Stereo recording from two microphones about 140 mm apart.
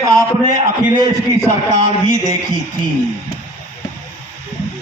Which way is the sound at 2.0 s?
55° left (ahead or behind).